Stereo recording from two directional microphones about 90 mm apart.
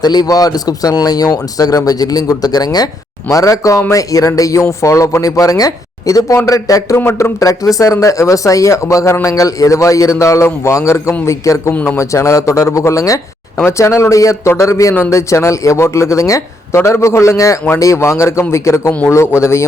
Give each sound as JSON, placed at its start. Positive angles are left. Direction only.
{"t": 0.0, "sound": "a man's voice", "side_deg": 50}
{"t": 11.7, "sound": "a man's voice", "side_deg": 20}
{"t": 11.9, "sound": "speech", "side_deg": 35}
{"t": 18.9, "sound": "a man's voice", "side_deg": 20}